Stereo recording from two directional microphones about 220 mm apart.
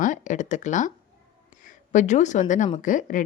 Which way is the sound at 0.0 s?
35° left (ahead or behind).